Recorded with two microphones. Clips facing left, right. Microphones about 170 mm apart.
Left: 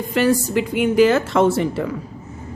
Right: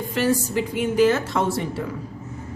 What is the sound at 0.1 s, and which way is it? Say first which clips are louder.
A woman's voice: left 5 dB; 70° left (ahead or behind).